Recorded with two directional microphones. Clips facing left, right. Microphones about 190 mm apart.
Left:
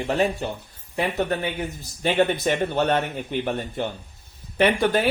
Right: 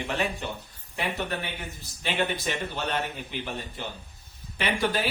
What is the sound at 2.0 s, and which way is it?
Speech, 50° left (ahead or behind).